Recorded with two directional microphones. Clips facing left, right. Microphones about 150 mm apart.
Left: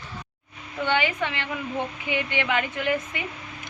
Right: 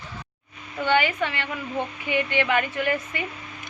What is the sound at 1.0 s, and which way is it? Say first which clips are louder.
Speech: right 1 dB; 15° left (ahead or behind).